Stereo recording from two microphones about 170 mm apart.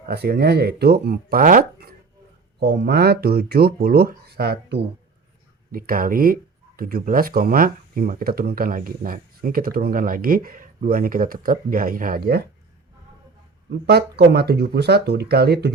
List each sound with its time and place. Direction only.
0.0 s speech: 65° right (ahead or behind)
2.6 s speech: 80° right
5.7 s speech: 60° right (ahead or behind)
13.8 s speech: 70° right (ahead or behind)